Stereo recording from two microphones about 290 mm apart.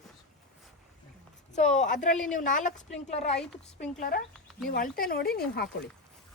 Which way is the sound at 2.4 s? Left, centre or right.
Left.